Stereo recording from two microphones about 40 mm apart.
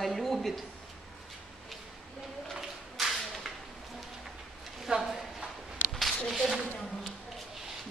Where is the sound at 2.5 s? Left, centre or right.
Centre.